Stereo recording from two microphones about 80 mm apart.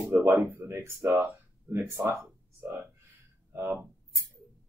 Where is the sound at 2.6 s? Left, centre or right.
Right.